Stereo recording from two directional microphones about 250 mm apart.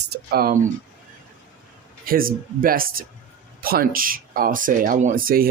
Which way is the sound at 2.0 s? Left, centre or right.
Right.